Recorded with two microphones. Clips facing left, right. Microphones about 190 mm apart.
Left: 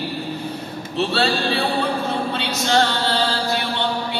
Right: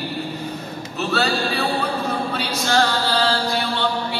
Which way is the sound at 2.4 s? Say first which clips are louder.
Left 1 dB; 20° left (ahead or behind).